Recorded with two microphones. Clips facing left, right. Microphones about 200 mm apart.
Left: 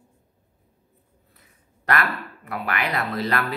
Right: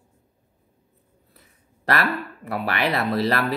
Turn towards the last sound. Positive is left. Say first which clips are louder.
# right 3 dB
turn(degrees=-35)  # may be behind; listen again after turning